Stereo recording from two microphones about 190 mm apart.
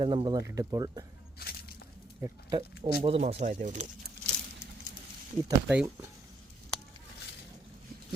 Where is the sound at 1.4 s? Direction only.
55° left (ahead or behind).